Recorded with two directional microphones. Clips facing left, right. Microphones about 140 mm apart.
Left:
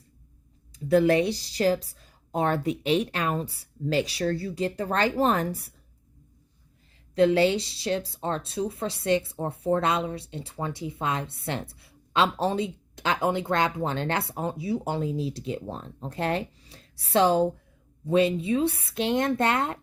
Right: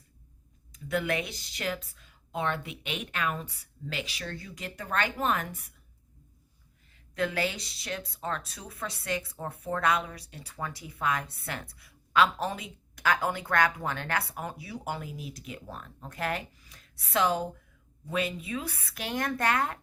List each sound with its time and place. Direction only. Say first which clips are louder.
0.7 s speech: left 10 dB; 35° left (ahead or behind)
7.2 s speech: left 10 dB; 25° left (ahead or behind)